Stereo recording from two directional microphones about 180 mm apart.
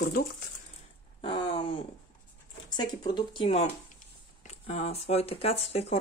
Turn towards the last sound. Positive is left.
turn(degrees=35)  # may be behind; listen again after turning